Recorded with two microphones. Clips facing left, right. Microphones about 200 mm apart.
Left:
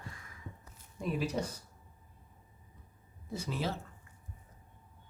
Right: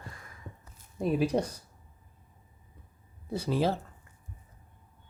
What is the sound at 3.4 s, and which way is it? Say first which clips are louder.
Speech: right 8 dB; 35° right (ahead or behind).